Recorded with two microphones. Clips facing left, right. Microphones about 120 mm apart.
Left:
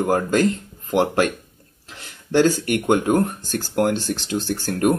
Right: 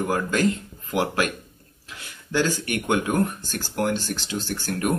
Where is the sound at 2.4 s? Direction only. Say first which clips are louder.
Left 7 dB; 40° left (ahead or behind).